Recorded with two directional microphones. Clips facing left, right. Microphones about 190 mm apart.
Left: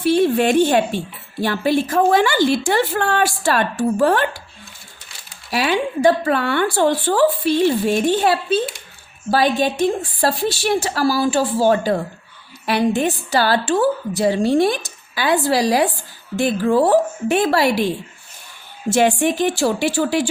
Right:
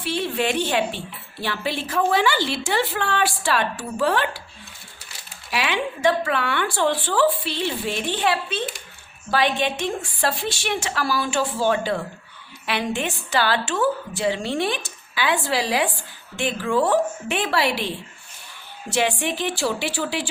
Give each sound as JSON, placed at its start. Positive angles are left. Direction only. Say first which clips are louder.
{"t": 0.0, "sound": "speech", "louder": "left 9 dB", "side_deg": 45}
{"t": 5.5, "sound": "a woman's voice", "louder": "left 5 dB", "side_deg": 40}